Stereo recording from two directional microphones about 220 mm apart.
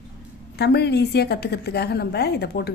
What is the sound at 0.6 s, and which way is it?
A woman's voice, 50° left (ahead or behind).